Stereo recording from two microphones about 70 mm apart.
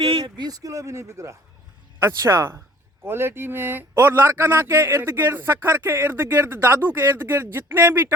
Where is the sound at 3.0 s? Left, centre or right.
Right.